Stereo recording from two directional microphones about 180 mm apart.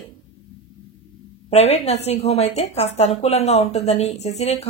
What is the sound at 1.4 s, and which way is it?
Speech, 35° left (ahead or behind).